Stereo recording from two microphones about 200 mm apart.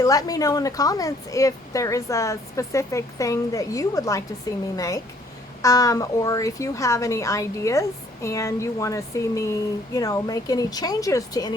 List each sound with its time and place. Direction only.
0.0 s a woman's voice: 15° left (ahead or behind)